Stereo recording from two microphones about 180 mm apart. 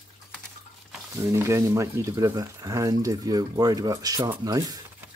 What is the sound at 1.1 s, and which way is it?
Speech, 15° right (ahead or behind).